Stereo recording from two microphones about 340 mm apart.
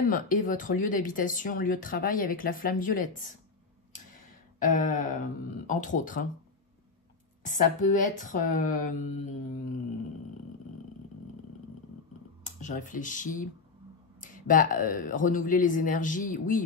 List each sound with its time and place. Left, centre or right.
0.1 s speech: left
4.6 s speech: left
7.4 s speech: left
12.4 s speech: left